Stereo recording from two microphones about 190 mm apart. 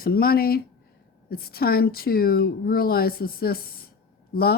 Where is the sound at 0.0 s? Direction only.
50° left (ahead or behind).